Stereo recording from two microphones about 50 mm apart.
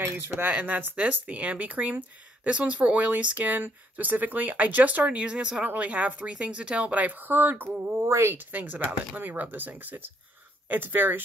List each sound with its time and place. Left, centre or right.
0.5 s speech: right
5.2 s speech: centre
5.6 s speech: right
8.5 s speech: right